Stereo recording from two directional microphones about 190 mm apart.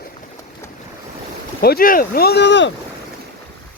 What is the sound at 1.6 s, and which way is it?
A man's voice, 50° left (ahead or behind).